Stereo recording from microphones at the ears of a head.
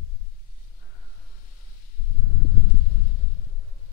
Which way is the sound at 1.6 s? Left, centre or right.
Left.